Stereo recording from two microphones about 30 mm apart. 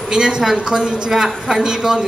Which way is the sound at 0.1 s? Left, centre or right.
Right.